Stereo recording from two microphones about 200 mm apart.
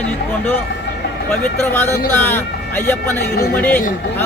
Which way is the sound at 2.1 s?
10° left (ahead or behind).